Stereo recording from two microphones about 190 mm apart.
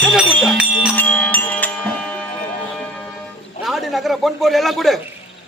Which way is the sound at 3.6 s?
Centre (ahead or behind).